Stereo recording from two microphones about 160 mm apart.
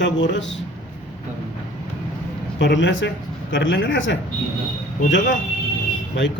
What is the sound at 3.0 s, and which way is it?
Speech, 90° left.